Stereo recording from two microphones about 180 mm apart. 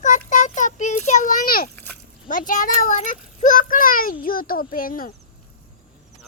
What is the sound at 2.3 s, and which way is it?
A child's voice, 50° left (ahead or behind).